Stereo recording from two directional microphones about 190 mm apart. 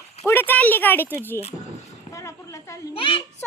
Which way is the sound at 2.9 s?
25° left (ahead or behind).